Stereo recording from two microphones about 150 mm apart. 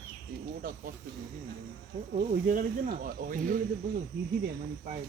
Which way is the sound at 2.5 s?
65° right (ahead or behind).